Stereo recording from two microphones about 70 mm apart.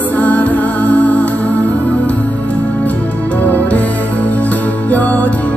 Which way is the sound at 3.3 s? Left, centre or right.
Left.